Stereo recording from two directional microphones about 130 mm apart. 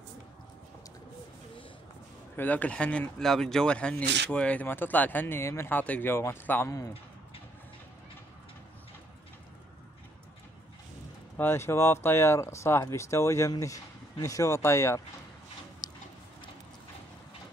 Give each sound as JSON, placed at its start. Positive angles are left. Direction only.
{"t": 2.3, "sound": "speech", "side_deg": 15}
{"t": 11.3, "sound": "speech", "side_deg": 20}
{"t": 15.8, "sound": "a sound", "side_deg": 30}